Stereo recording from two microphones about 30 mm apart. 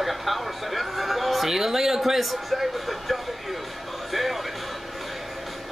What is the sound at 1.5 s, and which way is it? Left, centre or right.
A man's voice, centre.